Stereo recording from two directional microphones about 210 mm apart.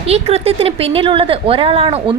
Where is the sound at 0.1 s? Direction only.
30° right (ahead or behind).